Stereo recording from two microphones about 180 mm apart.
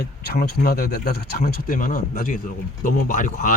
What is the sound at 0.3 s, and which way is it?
Speech, 60° left (ahead or behind).